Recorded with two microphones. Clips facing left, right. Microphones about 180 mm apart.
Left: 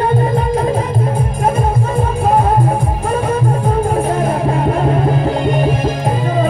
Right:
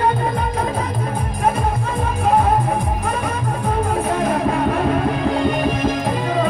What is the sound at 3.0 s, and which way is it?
Music, 35° left (ahead or behind).